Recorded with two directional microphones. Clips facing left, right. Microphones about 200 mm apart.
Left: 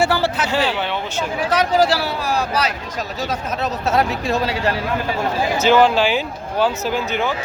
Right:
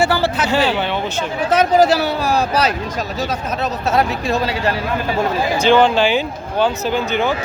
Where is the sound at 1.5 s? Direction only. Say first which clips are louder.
Right 4 dB; 20° right (ahead or behind).